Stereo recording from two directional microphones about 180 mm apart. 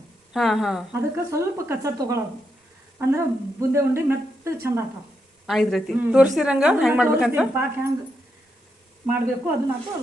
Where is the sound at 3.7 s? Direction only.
15° right (ahead or behind).